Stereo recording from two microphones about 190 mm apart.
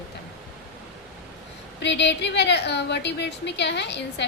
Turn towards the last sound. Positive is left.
turn(degrees=65)  # may be behind; listen again after turning